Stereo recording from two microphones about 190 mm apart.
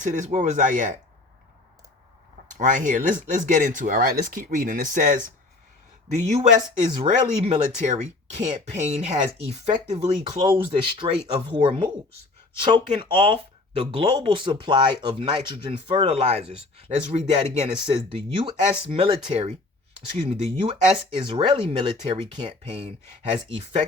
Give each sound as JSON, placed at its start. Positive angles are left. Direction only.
{"t": 0.0, "sound": "speech", "side_deg": -40}
{"t": 2.5, "sound": "speech", "side_deg": -40}
{"t": 19.2, "sound": "speech", "side_deg": -35}